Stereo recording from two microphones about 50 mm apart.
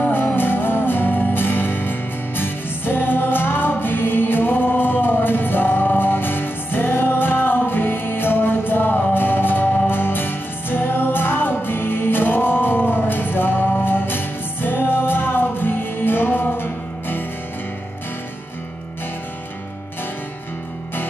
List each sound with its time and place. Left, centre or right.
0.4 s music: left